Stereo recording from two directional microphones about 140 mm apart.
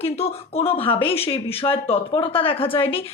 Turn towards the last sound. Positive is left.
turn(degrees=40)  # may be behind; listen again after turning